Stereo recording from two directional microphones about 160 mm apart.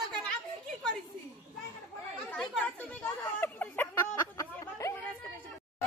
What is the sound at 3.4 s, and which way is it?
Music, 10° left (ahead or behind).